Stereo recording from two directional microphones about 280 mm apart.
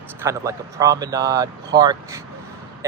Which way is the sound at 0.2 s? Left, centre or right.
Centre.